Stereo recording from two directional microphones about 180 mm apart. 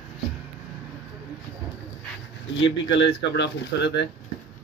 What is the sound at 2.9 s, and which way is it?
Speech, 75° left (ahead or behind).